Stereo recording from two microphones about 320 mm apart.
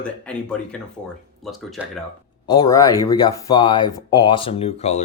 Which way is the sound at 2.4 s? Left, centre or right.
Centre.